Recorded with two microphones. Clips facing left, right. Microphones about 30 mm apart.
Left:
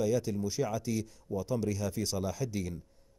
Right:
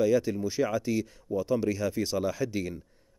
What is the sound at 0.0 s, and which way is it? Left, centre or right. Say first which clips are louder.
Speech: right 5 dB; centre.